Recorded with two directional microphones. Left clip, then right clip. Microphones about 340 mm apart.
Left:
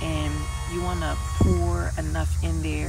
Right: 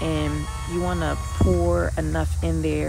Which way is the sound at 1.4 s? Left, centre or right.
Centre.